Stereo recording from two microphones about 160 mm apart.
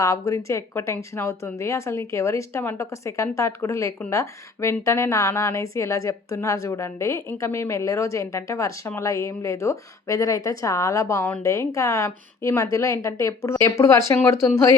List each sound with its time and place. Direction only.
0.0 s a woman's voice: 20° left (ahead or behind)